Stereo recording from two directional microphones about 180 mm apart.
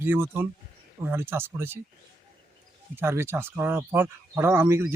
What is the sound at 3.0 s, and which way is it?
Speech, 15° right (ahead or behind).